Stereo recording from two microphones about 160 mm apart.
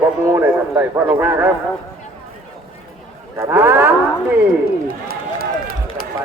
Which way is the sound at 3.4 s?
15° right (ahead or behind).